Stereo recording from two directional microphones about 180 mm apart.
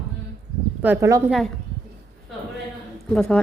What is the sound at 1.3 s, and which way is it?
Speech, centre (ahead or behind).